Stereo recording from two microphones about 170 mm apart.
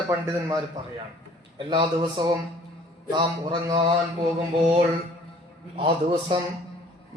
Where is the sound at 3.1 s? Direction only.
25° right (ahead or behind).